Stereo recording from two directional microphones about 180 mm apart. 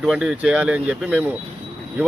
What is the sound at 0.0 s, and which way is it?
Speech, 5° right (ahead or behind).